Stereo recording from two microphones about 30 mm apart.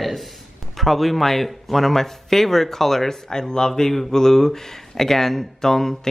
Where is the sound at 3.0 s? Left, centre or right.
Left.